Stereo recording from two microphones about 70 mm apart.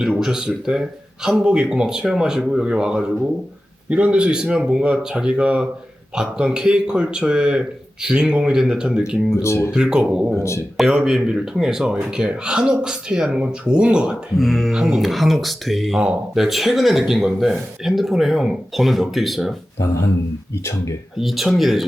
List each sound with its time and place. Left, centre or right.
0.0 s speech: centre
9.3 s speech: left
9.7 s speech: centre
14.3 s speech: centre
14.8 s speech: centre
20.5 s speech: left
21.2 s speech: centre